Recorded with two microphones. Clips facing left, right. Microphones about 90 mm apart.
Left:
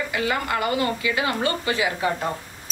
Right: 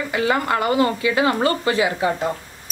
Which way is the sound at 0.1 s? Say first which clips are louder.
Right 7 dB; 35° right (ahead or behind).